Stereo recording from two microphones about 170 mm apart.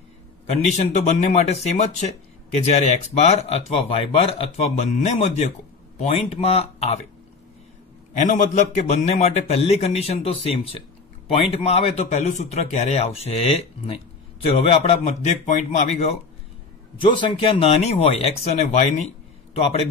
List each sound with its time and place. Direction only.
0.7 s a man's voice: 45° left (ahead or behind)
8.1 s a man's voice: 45° left (ahead or behind)
17.0 s a man's voice: 30° left (ahead or behind)